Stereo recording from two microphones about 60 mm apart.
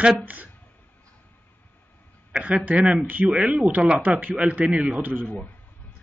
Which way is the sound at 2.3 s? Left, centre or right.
Right.